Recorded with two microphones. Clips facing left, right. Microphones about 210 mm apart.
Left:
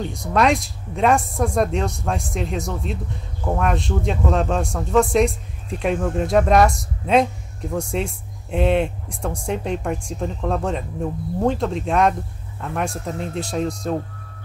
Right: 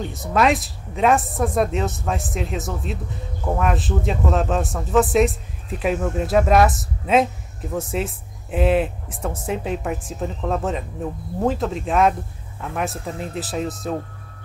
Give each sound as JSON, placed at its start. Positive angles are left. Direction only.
{"t": 0.0, "sound": "a man's voice", "side_deg": -5}